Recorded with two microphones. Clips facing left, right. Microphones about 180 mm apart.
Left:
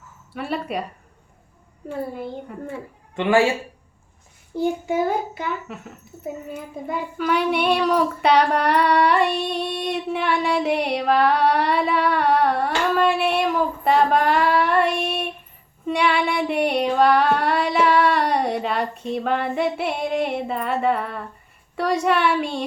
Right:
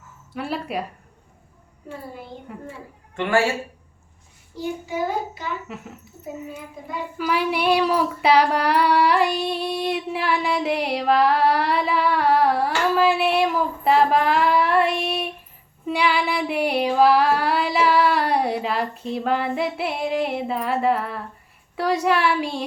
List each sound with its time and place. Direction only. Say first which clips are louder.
0.3 s child singing: left 1 dB; centre (ahead or behind)
2.5 s child singing: left 3 dB; centre (ahead or behind)
3.2 s speech: left 3 dB; 15° left (ahead or behind)
4.5 s a child's voice: left 6 dB; 55° left (ahead or behind)
5.6 s child singing: even; centre (ahead or behind)
7.2 s child singing: left 2 dB; 5° right (ahead or behind)